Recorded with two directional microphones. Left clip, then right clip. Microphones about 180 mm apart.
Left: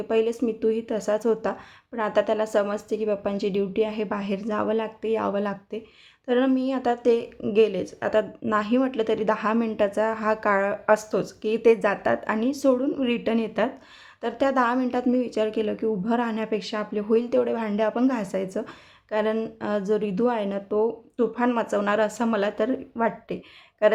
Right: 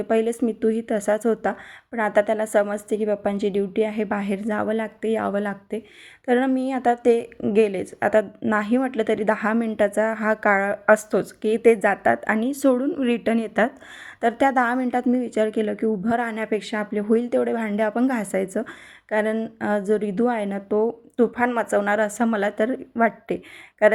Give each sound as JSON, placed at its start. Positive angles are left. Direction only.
{"t": 0.1, "sound": "a woman's voice", "side_deg": -25}